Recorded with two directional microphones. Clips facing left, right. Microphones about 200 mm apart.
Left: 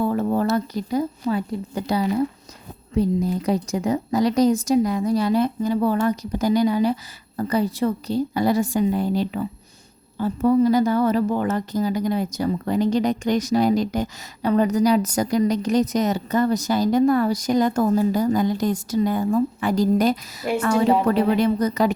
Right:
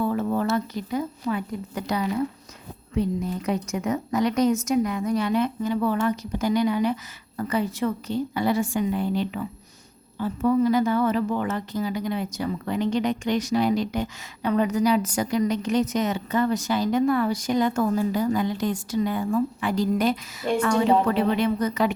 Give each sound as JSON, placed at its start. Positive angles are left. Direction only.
{"t": 0.0, "sound": "a woman's voice", "side_deg": 40}